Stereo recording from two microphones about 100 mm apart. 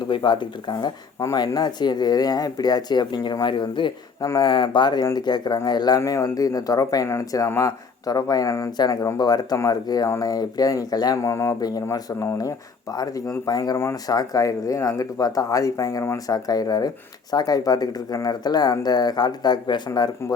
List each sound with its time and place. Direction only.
0.1 s speech: 50° left (ahead or behind)
1.2 s speech: 40° left (ahead or behind)
6.0 s speech: 25° left (ahead or behind)
7.1 s speech: 25° left (ahead or behind)
8.0 s speech: 40° left (ahead or behind)
11.2 s speech: 30° left (ahead or behind)
11.6 s speech: 40° left (ahead or behind)
13.7 s speech: 30° left (ahead or behind); by 20.1 s 45° left (ahead or behind)